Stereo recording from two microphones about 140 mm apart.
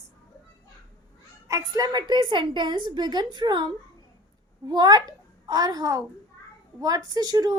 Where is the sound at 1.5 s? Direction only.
25° right (ahead or behind).